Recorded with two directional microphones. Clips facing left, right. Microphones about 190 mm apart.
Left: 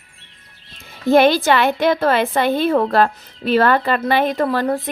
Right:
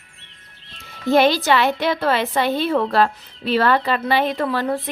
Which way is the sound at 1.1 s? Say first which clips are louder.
Left 3 dB; 55° left (ahead or behind).